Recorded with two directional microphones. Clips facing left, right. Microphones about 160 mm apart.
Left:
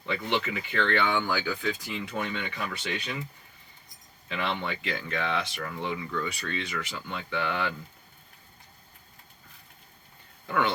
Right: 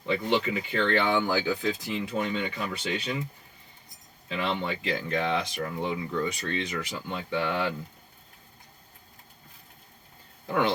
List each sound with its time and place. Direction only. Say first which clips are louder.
0.1 s speech: right 4 dB; 35° right (ahead or behind)
2.2 s speech: right 3 dB; 35° right (ahead or behind)
4.3 s speech: right 2 dB; 30° right (ahead or behind)
10.4 s speech: right 1 dB; 25° right (ahead or behind)